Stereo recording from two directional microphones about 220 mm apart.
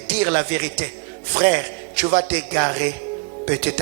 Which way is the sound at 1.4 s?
10° right (ahead or behind).